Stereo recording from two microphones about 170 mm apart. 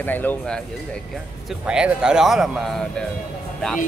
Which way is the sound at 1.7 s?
5° right (ahead or behind).